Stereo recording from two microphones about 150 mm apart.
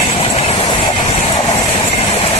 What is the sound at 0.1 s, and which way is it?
Vehicle, 40° left (ahead or behind).